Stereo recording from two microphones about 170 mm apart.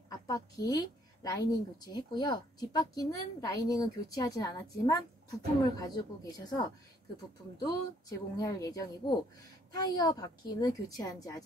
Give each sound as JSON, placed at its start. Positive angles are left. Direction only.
{"t": 0.3, "sound": "speech", "side_deg": 20}